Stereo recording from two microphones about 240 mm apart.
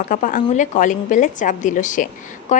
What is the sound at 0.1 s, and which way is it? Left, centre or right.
A woman's voice, left.